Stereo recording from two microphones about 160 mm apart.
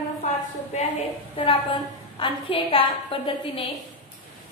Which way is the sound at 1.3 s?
35° left (ahead or behind).